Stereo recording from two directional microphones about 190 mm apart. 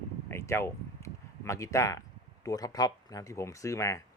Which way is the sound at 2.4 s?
20° left (ahead or behind).